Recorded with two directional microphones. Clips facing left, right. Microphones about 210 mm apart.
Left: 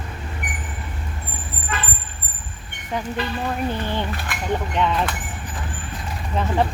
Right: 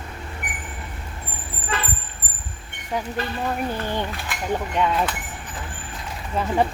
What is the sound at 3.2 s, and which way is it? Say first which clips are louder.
Speech: left 1 dB; 45° right (ahead or behind).